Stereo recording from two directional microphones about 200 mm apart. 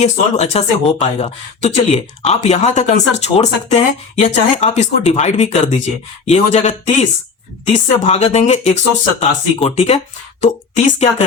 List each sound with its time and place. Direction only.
0.0 s speech: 35° left (ahead or behind)